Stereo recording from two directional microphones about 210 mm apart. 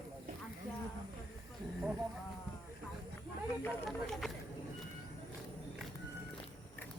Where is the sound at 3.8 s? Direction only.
Centre (ahead or behind).